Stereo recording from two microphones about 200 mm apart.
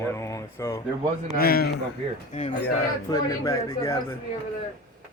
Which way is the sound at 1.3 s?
50° left (ahead or behind).